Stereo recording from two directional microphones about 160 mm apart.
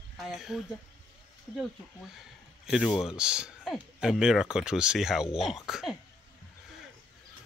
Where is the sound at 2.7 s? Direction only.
Centre (ahead or behind).